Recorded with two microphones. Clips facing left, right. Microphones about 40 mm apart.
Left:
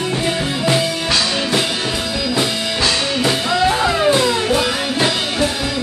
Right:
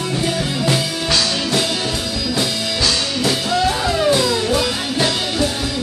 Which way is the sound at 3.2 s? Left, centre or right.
Left.